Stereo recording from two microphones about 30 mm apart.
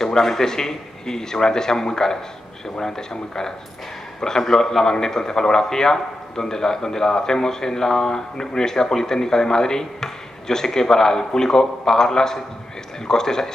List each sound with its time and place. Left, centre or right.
0.0 s a man's voice: centre